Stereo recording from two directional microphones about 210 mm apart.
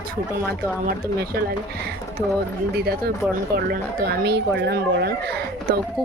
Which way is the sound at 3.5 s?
50° right (ahead or behind).